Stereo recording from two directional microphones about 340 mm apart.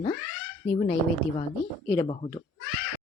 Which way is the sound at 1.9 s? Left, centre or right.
Centre.